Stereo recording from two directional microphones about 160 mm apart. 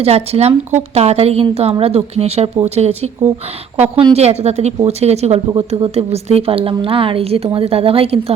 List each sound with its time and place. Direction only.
0.0 s speech: 40° right (ahead or behind)